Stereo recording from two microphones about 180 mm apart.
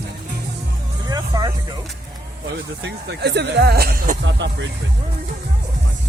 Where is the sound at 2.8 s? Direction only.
70° right (ahead or behind).